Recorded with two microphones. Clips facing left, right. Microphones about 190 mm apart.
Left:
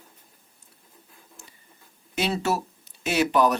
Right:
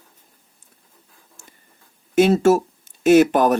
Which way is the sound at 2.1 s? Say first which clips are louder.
Right 11 dB; 45° right (ahead or behind).